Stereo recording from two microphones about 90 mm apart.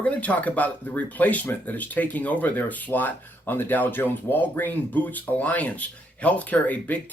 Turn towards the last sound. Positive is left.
turn(degrees=15)  # may be behind; listen again after turning